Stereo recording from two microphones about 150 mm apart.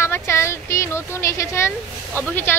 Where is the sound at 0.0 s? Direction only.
15° left (ahead or behind).